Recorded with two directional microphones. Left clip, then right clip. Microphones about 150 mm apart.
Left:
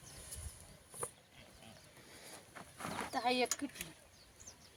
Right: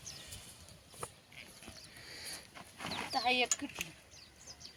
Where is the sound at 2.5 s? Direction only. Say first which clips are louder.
Even; 10° right (ahead or behind).